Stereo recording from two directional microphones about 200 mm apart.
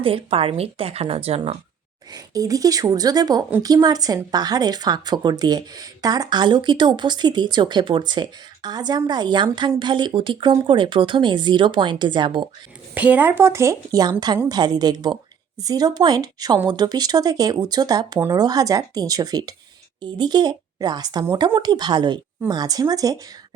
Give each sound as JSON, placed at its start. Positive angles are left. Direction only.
{"t": 0.0, "sound": "speech", "side_deg": -25}
{"t": 2.1, "sound": "speech", "side_deg": -20}
{"t": 12.9, "sound": "speech", "side_deg": -10}